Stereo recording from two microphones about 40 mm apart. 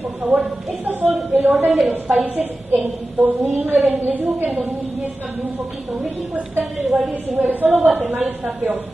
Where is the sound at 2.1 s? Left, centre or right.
Right.